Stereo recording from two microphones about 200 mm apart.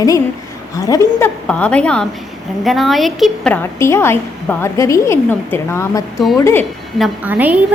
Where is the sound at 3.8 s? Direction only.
10° left (ahead or behind).